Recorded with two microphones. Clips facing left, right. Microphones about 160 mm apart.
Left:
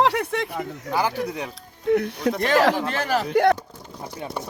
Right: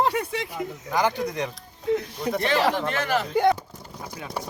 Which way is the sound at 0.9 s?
5° left (ahead or behind).